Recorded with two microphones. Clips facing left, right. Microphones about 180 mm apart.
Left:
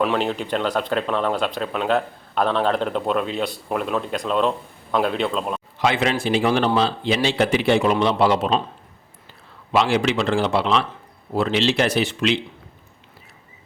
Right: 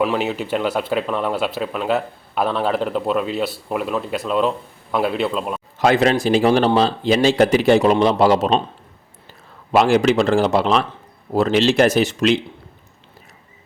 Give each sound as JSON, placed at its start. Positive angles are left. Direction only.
{"t": 0.0, "sound": "speech", "side_deg": -5}
{"t": 5.8, "sound": "a man's voice", "side_deg": -40}
{"t": 9.7, "sound": "speech", "side_deg": -45}